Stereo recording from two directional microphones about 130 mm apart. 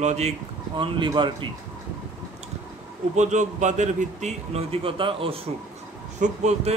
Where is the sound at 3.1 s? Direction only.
65° right (ahead or behind); by 5.3 s 45° right (ahead or behind).